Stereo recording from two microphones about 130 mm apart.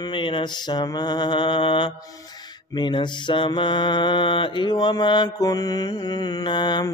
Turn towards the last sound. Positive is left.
turn(degrees=35)  # may be behind; listen again after turning